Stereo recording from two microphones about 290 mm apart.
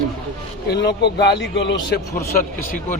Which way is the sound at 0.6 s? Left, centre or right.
Left.